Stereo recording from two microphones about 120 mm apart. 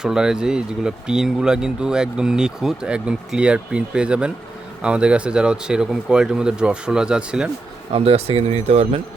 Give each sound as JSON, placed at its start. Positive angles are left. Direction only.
{"t": 0.0, "sound": "speech", "side_deg": -5}
{"t": 7.9, "sound": "speech", "side_deg": -55}